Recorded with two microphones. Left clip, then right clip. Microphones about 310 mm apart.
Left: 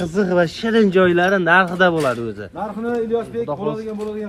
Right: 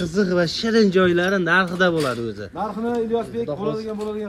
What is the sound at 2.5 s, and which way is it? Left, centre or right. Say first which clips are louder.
Speech: left 1 dB; right.